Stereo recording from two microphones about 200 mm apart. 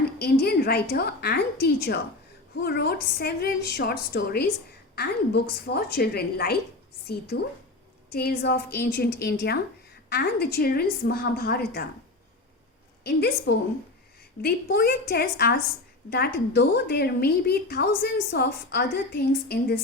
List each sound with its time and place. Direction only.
0.2 s a woman's voice: 55° left (ahead or behind)
8.1 s a woman's voice: 50° left (ahead or behind)
13.1 s a woman's voice: 55° left (ahead or behind)